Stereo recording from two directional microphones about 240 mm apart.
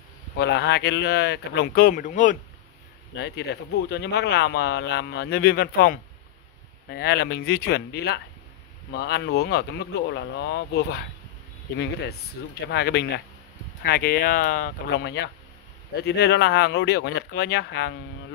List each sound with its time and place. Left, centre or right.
0.4 s speech: left
3.2 s speech: left